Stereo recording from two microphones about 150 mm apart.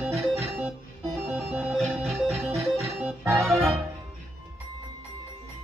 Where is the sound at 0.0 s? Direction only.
5° right (ahead or behind).